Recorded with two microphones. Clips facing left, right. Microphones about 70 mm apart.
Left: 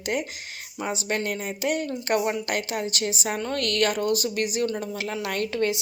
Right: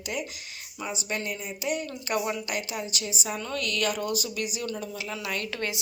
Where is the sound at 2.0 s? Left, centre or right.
Left.